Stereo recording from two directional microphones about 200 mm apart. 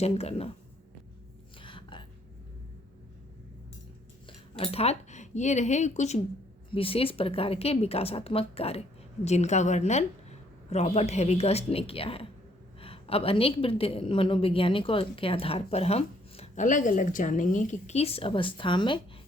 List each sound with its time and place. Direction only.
0.0 s a woman's voice: 30° left (ahead or behind)
1.6 s a sound: 25° left (ahead or behind)
4.5 s a woman's voice: 30° left (ahead or behind)